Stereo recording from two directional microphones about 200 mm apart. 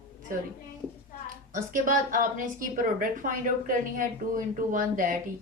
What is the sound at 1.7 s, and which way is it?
A woman's voice, 40° right (ahead or behind).